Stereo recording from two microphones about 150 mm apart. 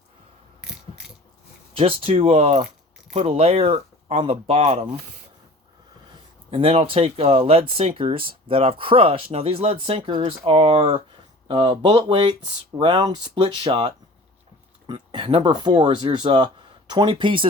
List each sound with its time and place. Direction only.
0.6 s mechanisms: 5° right (ahead or behind)
1.7 s speech: 35° right (ahead or behind)
6.5 s speech: 35° right (ahead or behind)